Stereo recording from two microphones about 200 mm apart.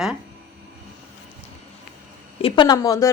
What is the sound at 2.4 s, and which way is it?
Speech, 25° left (ahead or behind).